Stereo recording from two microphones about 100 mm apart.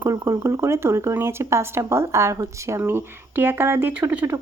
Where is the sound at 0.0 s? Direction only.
30° right (ahead or behind).